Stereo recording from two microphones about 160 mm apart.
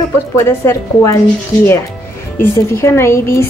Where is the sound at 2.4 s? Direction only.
15° left (ahead or behind).